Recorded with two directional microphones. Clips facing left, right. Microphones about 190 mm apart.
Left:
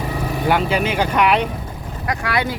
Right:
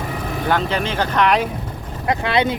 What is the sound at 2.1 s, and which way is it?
Speech, 25° right (ahead or behind).